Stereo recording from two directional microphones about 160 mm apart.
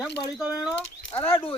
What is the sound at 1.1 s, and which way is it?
Speech, 35° left (ahead or behind).